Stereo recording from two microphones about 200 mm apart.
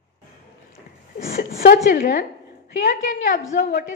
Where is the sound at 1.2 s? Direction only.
45° left (ahead or behind).